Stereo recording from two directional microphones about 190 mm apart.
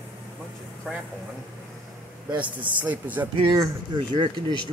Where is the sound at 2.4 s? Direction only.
10° right (ahead or behind).